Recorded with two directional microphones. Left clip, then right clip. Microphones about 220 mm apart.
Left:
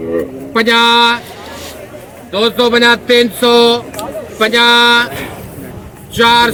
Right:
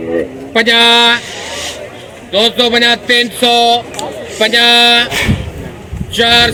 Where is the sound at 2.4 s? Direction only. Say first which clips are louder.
Right 1 dB; 75° left (ahead or behind).